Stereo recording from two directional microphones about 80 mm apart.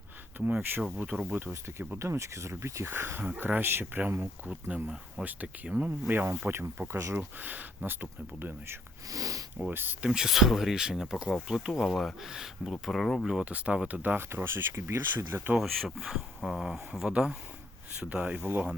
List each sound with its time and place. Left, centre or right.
0.3 s speech: right
9.0 s speech: right
9.6 s speech: right
10.1 s speech: centre
13.5 s speech: centre
15.5 s speech: centre; by 18.7 s right